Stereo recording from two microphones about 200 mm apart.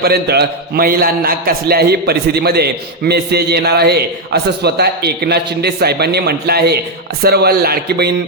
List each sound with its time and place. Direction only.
0.0 s a man's voice: 55° right (ahead or behind)